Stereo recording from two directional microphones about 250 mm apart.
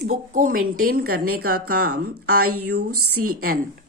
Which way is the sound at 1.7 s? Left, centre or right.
Right.